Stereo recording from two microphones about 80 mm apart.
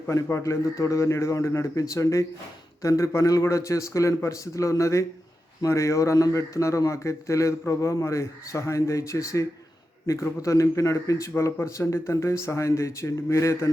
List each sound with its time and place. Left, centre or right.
0.1 s speech: left